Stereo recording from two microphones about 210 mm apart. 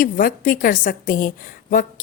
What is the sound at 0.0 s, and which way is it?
A woman's voice, 40° left (ahead or behind).